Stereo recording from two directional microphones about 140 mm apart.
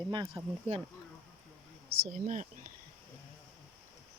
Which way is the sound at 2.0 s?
70° right (ahead or behind).